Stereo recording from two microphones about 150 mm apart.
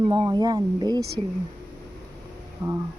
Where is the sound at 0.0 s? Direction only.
30° right (ahead or behind).